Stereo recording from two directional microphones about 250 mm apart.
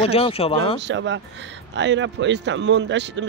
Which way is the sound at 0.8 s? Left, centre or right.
Right.